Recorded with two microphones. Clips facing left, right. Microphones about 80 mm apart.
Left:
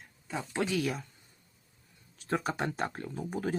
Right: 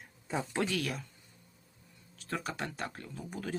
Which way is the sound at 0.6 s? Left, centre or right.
Centre.